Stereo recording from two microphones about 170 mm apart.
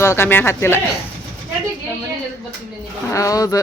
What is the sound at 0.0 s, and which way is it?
Speech, 15° left (ahead or behind).